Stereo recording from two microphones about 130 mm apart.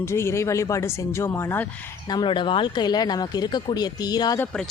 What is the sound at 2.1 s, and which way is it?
Speech, 35° left (ahead or behind).